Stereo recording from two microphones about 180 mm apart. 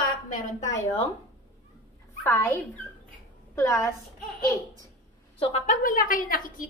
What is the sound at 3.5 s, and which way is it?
Speech, 15° left (ahead or behind).